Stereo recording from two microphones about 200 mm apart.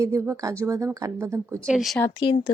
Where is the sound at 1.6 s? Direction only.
Centre (ahead or behind).